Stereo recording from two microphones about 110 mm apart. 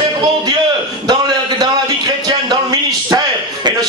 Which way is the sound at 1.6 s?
40° right (ahead or behind).